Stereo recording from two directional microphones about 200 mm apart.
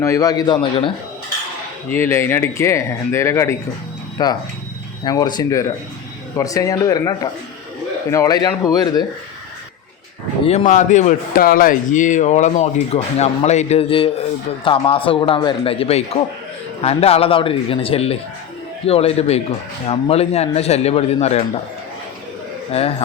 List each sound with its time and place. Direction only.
0.0 s a man's voice: 15° left (ahead or behind)
1.9 s a man's voice: 10° left (ahead or behind)
10.4 s a man's voice: 30° left (ahead or behind)
22.7 s a man's voice: 30° left (ahead or behind)